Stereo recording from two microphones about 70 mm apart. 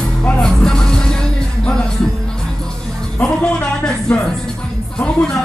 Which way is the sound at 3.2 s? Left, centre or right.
Centre.